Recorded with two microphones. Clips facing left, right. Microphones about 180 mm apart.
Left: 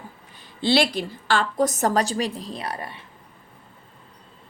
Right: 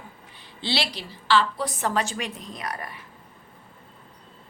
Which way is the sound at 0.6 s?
50° left (ahead or behind).